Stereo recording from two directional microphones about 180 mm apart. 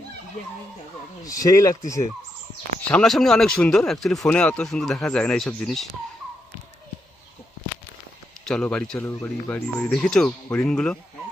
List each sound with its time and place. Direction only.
1.2 s speech: 20° left (ahead or behind)
2.9 s speech: 5° left (ahead or behind)
8.4 s speech: 5° left (ahead or behind)